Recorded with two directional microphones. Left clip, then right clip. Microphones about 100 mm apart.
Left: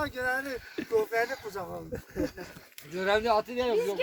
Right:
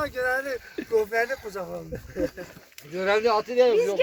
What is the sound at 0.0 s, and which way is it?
Speech, 55° left (ahead or behind).